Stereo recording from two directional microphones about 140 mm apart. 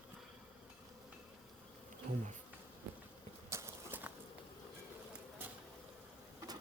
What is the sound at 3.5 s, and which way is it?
Clip-clop, 20° right (ahead or behind).